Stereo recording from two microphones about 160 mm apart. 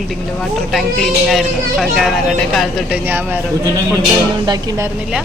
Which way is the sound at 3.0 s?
15° right (ahead or behind).